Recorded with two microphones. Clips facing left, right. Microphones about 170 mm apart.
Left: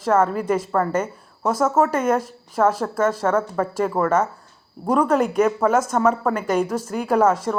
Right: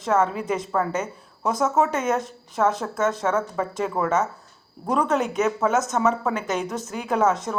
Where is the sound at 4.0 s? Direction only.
10° left (ahead or behind).